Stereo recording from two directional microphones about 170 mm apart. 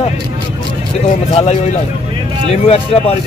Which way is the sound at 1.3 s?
40° left (ahead or behind).